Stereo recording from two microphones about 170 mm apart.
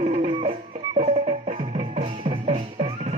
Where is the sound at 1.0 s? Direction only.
40° right (ahead or behind).